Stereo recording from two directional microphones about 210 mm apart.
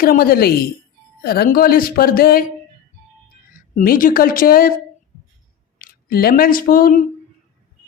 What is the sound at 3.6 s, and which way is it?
A woman's voice, 45° left (ahead or behind).